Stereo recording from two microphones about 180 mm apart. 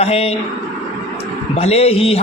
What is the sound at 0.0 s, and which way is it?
Speech, 35° left (ahead or behind).